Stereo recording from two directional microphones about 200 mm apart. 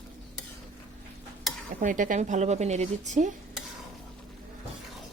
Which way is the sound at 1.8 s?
40° right (ahead or behind).